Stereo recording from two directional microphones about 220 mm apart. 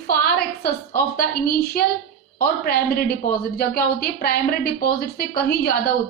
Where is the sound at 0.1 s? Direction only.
45° left (ahead or behind).